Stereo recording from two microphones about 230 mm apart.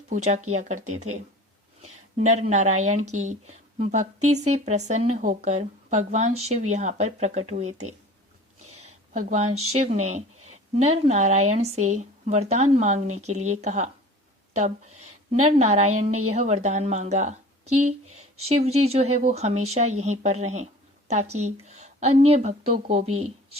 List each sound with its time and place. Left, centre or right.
0.1 s a woman's voice: right
8.7 s a sound: right
9.7 s a woman's voice: right